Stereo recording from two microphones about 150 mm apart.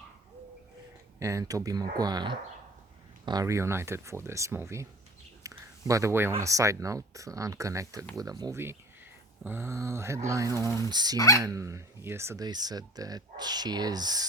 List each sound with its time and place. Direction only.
1.2 s speech: 20° right (ahead or behind)
11.2 s speech: 20° left (ahead or behind)
11.4 s speech: 20° right (ahead or behind)